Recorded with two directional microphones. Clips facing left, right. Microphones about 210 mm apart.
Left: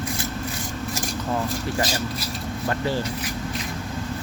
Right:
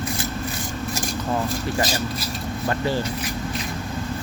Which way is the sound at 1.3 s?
25° right (ahead or behind).